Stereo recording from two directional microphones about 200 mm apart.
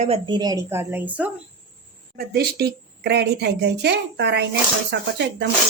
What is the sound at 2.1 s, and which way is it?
A woman's voice, 50° right (ahead or behind).